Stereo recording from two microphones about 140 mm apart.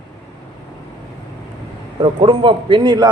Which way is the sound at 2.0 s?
40° right (ahead or behind).